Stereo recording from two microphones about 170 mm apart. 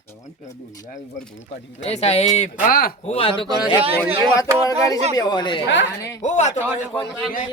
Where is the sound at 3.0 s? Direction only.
35° left (ahead or behind).